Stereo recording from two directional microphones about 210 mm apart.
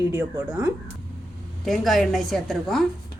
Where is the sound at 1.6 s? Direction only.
Centre (ahead or behind).